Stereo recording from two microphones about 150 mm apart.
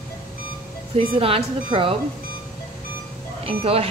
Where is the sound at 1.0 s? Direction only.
40° right (ahead or behind).